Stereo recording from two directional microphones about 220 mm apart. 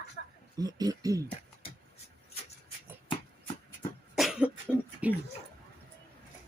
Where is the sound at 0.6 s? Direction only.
15° right (ahead or behind).